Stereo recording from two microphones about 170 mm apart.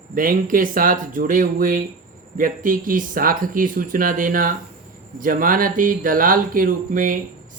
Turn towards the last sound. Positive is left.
turn(degrees=-55)  # may be behind; listen again after turning